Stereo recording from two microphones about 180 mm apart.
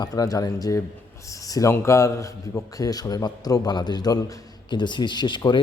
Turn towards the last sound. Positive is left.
turn(degrees=25)  # may be behind; listen again after turning